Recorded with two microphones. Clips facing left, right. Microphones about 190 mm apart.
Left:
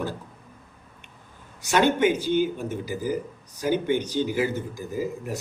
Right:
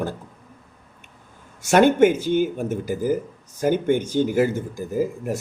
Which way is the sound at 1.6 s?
50° right (ahead or behind).